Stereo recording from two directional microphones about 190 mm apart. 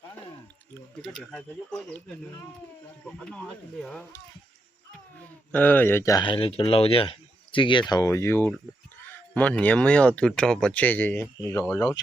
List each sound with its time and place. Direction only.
0.7 s speech: 5° left (ahead or behind)
5.5 s speech: 10° left (ahead or behind)